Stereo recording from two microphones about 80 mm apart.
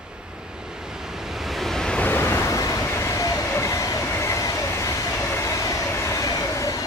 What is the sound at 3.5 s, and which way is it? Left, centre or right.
Train, left.